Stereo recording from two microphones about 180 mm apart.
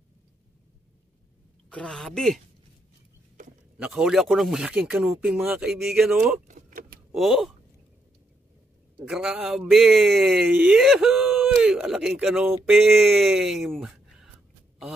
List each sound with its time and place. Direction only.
1.7 s speech: 5° left (ahead or behind)
3.7 s speech: 5° right (ahead or behind)
6.4 s vehicle: 45° right (ahead or behind)
7.2 s speech: centre (ahead or behind)
9.0 s speech: centre (ahead or behind)